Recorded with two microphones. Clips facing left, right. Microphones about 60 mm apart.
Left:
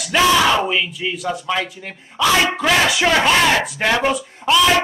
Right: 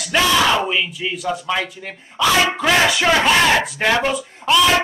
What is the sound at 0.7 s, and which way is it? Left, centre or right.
Speech, centre.